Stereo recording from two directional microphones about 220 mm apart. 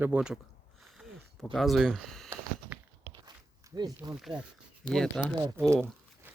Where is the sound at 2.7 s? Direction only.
5° right (ahead or behind).